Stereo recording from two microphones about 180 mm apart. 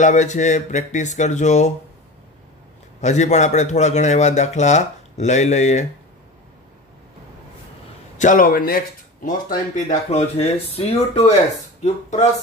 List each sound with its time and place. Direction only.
0.0 s speech: 40° left (ahead or behind)
3.0 s speech: 40° left (ahead or behind)
8.2 s speech: 50° left (ahead or behind)